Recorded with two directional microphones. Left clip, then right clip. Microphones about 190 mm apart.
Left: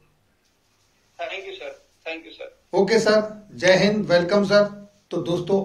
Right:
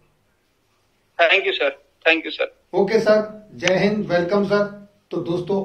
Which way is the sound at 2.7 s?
45° left (ahead or behind).